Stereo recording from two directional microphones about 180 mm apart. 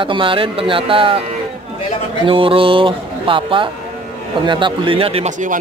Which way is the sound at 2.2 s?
30° right (ahead or behind).